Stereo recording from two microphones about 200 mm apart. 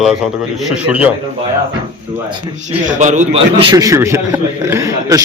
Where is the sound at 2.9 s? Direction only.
35° right (ahead or behind).